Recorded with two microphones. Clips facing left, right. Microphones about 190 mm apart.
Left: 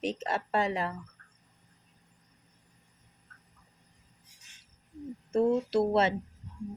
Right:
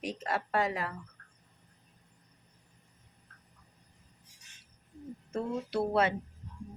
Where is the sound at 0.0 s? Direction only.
25° left (ahead or behind).